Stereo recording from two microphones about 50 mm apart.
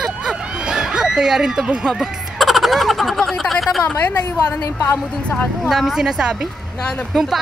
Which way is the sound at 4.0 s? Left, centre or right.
Left.